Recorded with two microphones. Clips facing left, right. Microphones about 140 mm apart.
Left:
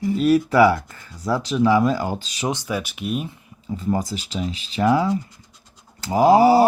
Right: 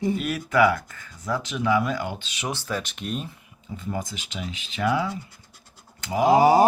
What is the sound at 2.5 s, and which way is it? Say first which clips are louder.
Speech: left 4 dB; 15° left (ahead or behind).